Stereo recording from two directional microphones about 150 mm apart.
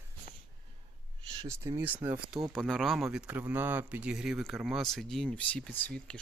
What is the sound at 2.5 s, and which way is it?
Speech, 5° left (ahead or behind).